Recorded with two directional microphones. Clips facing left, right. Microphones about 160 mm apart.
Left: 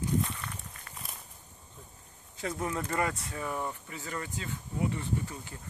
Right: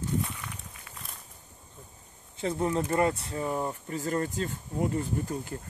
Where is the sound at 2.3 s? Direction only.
25° right (ahead or behind).